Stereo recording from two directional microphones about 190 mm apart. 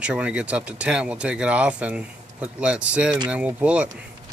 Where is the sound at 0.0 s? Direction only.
5° right (ahead or behind).